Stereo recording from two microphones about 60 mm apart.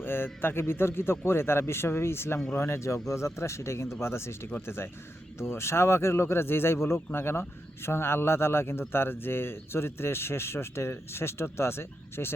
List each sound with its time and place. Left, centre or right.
0.0 s speech: left